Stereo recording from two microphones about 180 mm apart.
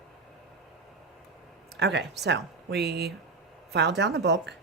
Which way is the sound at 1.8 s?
70° right (ahead or behind).